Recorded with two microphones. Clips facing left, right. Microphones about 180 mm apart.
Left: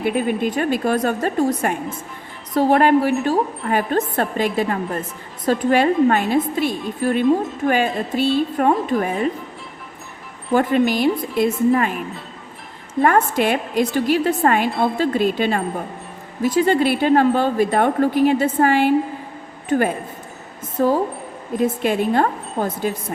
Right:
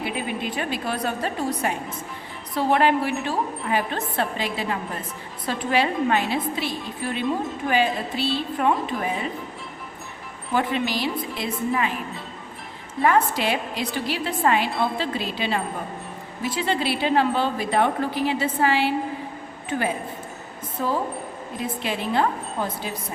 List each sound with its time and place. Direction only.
0.0 s speech: 50° left (ahead or behind)
10.5 s speech: 45° left (ahead or behind)
13.1 s speech: 50° left (ahead or behind)
14.7 s speech: centre (ahead or behind)
14.9 s speech: 50° left (ahead or behind)